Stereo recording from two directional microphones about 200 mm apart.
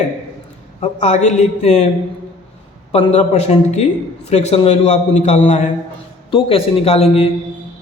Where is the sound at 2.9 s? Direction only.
35° left (ahead or behind).